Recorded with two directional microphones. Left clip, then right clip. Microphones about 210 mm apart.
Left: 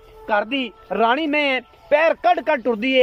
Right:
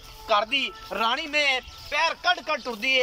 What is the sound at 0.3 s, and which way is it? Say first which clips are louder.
Speech: left 2 dB; 45° left (ahead or behind).